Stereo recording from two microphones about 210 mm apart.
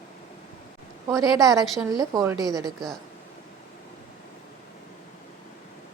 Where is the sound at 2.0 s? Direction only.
15° right (ahead or behind).